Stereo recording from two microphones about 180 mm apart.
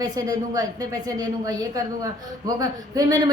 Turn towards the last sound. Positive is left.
turn(degrees=-20)  # may be behind; listen again after turning